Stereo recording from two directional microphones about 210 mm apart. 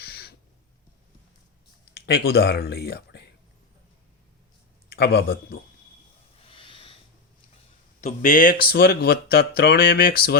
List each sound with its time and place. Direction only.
0.0 s owl: 50° left (ahead or behind)
2.0 s speech: 50° left (ahead or behind)
4.9 s speech: 50° left (ahead or behind)
6.4 s snort: 25° left (ahead or behind)
8.0 s speech: 40° left (ahead or behind)